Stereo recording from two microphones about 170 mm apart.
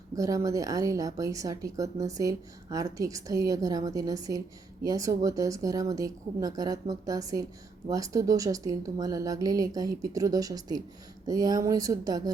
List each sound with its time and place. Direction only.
0.2 s speech: 20° right (ahead or behind)